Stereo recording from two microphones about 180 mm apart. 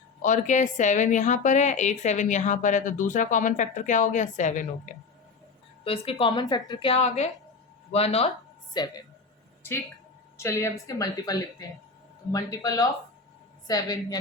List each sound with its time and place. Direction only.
0.2 s a woman's voice: 45° left (ahead or behind)
5.8 s a woman's voice: 30° left (ahead or behind)
8.7 s a woman's voice: 25° left (ahead or behind)
10.3 s a woman's voice: 15° left (ahead or behind)